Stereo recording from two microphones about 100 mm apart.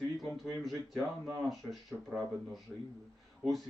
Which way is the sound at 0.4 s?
Centre (ahead or behind).